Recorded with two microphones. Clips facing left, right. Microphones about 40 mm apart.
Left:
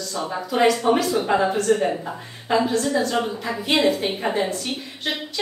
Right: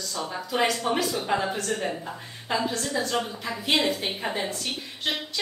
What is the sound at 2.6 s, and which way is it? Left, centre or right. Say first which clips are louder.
Speech: left 7 dB; centre.